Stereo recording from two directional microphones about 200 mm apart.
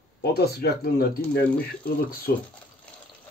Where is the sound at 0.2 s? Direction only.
50° left (ahead or behind).